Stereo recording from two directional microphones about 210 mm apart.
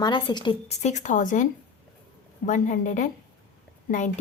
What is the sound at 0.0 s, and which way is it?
Speech, 20° left (ahead or behind).